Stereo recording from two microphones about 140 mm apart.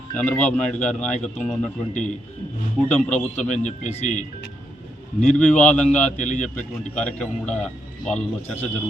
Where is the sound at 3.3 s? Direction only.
55° left (ahead or behind).